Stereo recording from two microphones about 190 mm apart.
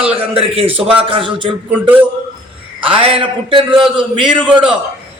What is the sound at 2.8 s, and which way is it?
A man's voice, 30° right (ahead or behind).